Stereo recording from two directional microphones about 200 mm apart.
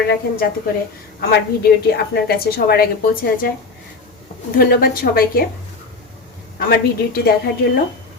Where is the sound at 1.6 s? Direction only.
50° left (ahead or behind).